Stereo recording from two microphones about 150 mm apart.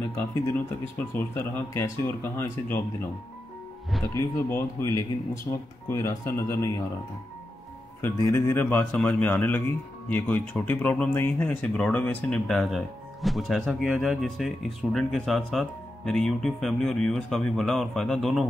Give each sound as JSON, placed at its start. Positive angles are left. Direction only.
{"t": 0.1, "sound": "speech", "side_deg": 20}
{"t": 4.1, "sound": "speech", "side_deg": 20}
{"t": 8.0, "sound": "speech", "side_deg": 15}